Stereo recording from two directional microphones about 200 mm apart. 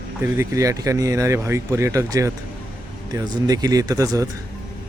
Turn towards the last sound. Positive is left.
turn(degrees=-15)  # may be behind; listen again after turning